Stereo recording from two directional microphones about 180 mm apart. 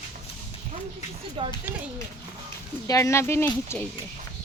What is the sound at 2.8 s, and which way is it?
Speech, 20° left (ahead or behind).